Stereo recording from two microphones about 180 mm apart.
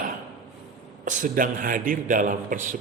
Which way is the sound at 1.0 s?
50° right (ahead or behind).